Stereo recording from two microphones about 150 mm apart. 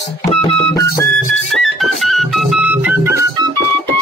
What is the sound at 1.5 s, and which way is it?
Music, centre (ahead or behind).